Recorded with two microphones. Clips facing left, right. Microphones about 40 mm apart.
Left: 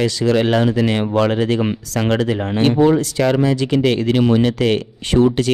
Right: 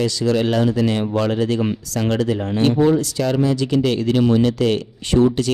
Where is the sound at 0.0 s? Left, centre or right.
Left.